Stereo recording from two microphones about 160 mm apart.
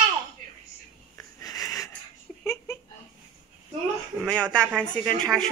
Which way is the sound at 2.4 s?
15° left (ahead or behind).